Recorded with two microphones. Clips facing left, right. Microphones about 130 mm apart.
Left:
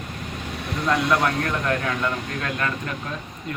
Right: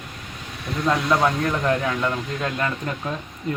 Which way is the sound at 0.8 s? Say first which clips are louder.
Right 1 dB; 20° right (ahead or behind).